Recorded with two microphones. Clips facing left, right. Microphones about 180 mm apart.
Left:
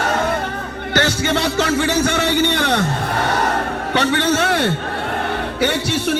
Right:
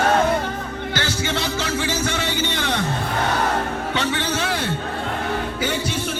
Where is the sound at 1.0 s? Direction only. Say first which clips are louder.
Left 8 dB; 65° left (ahead or behind).